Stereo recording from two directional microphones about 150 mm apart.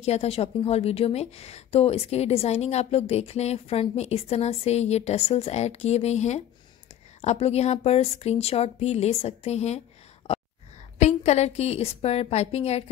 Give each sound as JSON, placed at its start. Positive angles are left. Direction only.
{"t": 0.0, "sound": "a woman's voice", "side_deg": 45}
{"t": 11.0, "sound": "a woman's voice", "side_deg": 50}